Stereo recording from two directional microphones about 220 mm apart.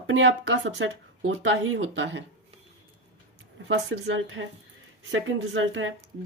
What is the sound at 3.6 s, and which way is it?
Speech, 55° right (ahead or behind).